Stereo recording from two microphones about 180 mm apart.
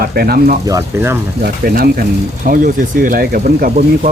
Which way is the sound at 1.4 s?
55° right (ahead or behind).